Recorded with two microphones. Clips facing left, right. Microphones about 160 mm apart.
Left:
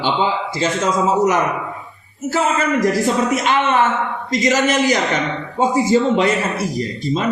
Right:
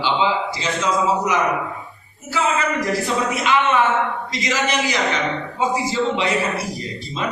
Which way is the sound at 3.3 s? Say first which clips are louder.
Left 2 dB; 45° left (ahead or behind).